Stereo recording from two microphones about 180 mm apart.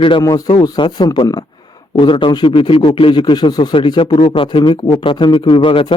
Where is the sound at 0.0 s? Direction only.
25° left (ahead or behind).